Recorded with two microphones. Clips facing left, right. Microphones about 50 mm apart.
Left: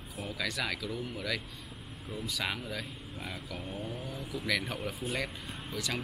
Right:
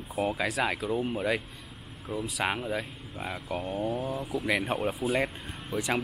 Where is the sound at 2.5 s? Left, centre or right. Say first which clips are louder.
Right 6 dB; right.